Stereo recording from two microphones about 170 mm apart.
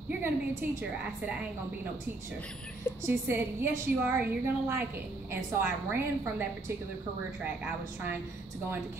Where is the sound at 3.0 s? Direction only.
15° right (ahead or behind).